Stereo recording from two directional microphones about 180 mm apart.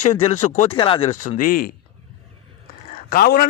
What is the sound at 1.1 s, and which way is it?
Speech, 45° left (ahead or behind).